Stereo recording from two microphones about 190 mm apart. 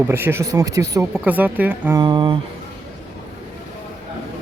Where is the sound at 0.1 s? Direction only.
10° right (ahead or behind).